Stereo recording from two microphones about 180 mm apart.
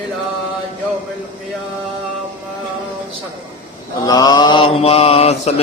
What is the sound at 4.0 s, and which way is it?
Mantra, 20° left (ahead or behind).